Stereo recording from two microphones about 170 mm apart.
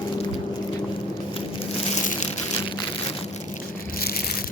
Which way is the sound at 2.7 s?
30° left (ahead or behind).